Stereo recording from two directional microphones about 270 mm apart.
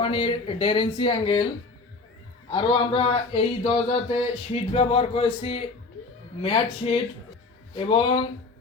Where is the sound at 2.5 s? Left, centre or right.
Centre.